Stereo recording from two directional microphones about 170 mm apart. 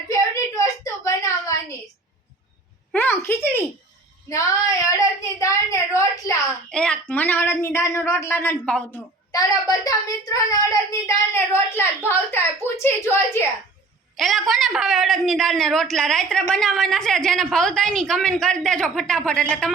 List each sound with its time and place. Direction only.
1.0 s a sound: 20° left (ahead or behind)
2.9 s a woman's voice: 10° left (ahead or behind)
6.7 s a woman's voice: 5° left (ahead or behind)
9.3 s speech: 20° left (ahead or behind)
14.2 s a woman's voice: centre (ahead or behind)